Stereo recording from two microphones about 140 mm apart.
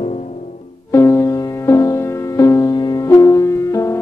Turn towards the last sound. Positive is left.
turn(degrees=20)  # may be behind; listen again after turning